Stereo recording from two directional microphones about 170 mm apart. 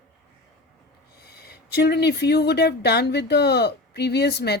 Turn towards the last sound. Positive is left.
turn(degrees=75)  # may be behind; listen again after turning